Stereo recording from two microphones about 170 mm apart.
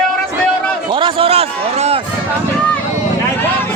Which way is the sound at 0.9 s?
30° right (ahead or behind).